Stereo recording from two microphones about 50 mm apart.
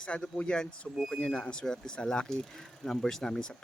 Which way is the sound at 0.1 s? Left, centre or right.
Centre.